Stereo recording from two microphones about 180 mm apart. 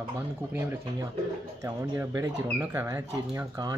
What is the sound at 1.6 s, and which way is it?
Speech, 15° right (ahead or behind).